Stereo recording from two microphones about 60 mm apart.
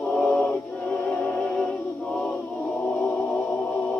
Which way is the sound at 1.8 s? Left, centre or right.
Centre.